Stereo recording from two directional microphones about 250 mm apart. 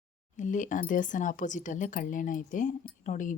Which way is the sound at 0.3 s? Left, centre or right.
Left.